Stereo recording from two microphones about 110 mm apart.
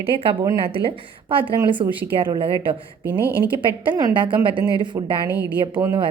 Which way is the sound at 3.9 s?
35° right (ahead or behind).